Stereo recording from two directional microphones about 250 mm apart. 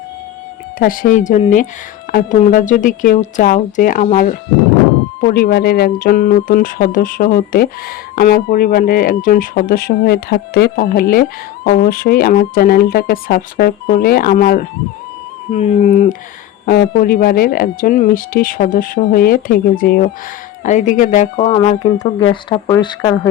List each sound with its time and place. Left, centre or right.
0.8 s speech: left
5.2 s speech: left; by 23.3 s centre